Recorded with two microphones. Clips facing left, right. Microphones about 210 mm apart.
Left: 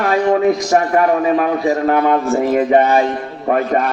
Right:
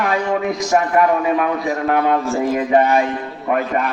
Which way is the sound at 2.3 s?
55° left (ahead or behind).